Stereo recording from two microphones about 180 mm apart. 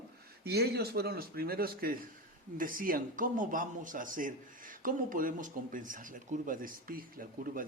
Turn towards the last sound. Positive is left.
turn(degrees=-50)  # may be behind; listen again after turning